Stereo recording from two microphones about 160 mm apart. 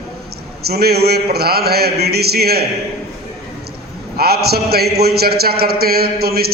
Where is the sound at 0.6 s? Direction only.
80° right.